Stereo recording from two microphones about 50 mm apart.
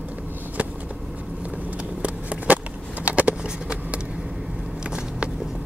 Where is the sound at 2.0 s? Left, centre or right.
Right.